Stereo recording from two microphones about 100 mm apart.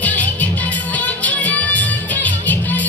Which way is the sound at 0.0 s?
15° left (ahead or behind).